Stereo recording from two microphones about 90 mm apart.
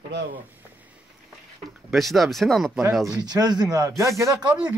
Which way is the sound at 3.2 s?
50° right (ahead or behind).